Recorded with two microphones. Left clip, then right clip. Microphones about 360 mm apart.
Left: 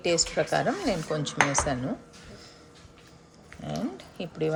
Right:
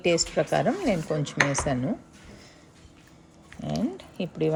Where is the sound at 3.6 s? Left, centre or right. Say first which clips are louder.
Right 3 dB; centre.